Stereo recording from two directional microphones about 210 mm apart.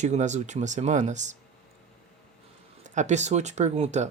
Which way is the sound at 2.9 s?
35° right (ahead or behind).